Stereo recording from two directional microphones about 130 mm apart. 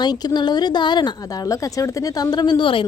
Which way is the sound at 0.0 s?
30° left (ahead or behind).